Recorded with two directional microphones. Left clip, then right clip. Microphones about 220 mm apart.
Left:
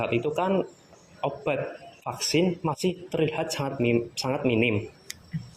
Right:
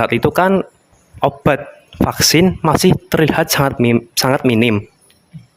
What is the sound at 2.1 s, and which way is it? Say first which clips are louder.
Speech: right 12 dB; 45° right (ahead or behind).